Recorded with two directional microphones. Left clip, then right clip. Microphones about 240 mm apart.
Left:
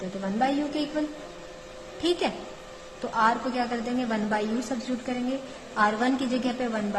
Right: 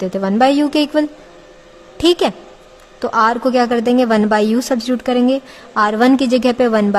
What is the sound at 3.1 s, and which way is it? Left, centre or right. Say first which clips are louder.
A woman's voice: right 11 dB; right.